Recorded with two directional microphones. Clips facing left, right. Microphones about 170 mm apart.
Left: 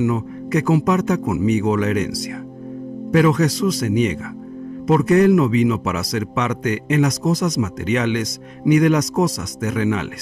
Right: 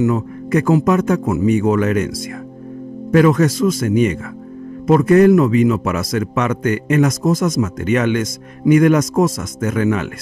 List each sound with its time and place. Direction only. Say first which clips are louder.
0.0 s a man's voice: right 3 dB; 50° right (ahead or behind)